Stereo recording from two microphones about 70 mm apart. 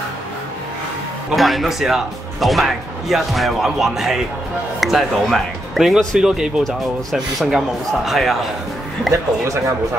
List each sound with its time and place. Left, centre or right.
1.3 s speech: centre